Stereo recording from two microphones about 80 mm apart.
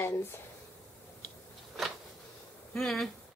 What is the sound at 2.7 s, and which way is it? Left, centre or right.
Speech, centre.